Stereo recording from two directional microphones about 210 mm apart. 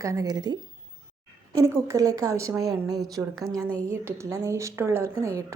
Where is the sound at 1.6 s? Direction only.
15° right (ahead or behind).